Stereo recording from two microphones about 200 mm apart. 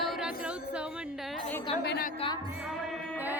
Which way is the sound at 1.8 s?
55° left (ahead or behind).